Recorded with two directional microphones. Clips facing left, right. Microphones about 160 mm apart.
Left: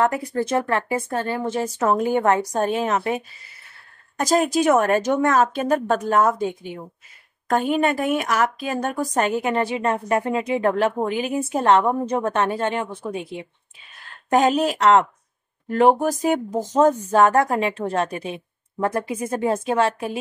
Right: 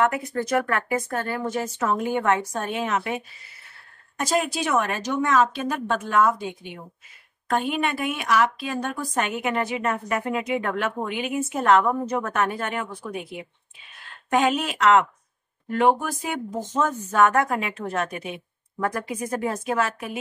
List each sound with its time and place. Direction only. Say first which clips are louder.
0.3 s a woman's voice: left 2 dB; 30° left (ahead or behind)
4.2 s a woman's voice: left 6 dB; 40° left (ahead or behind)
14.3 s a woman's voice: left 4 dB; 40° left (ahead or behind)